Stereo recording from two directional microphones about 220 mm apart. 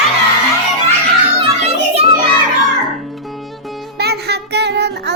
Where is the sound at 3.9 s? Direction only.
45° right (ahead or behind).